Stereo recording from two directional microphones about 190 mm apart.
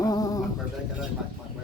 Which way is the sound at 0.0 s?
20° left (ahead or behind).